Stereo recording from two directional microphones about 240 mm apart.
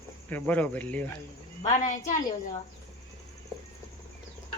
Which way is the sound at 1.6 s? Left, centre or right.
Left.